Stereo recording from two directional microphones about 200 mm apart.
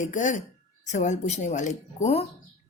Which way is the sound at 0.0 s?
40° left (ahead or behind).